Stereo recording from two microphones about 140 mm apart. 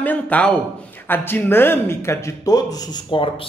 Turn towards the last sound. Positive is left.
turn(degrees=35)  # may be behind; listen again after turning